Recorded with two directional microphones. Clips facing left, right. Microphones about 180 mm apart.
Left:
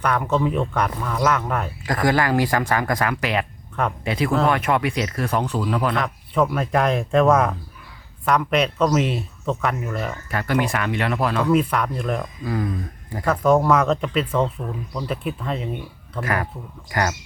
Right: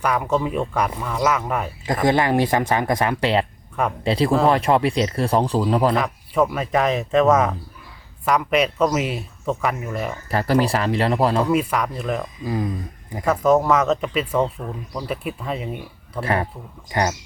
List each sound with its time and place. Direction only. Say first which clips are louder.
0.0 s speech: even; 5° right (ahead or behind)
1.9 s speech: right 1 dB; 25° right (ahead or behind)
5.9 s speech: right 2 dB; 5° right (ahead or behind)
10.2 s speech: right 4 dB; 35° right (ahead or behind)
11.4 s speech: left 1 dB; 5° right (ahead or behind)
13.2 s speech: even; 5° right (ahead or behind)
16.2 s speech: right 2 dB; 30° right (ahead or behind)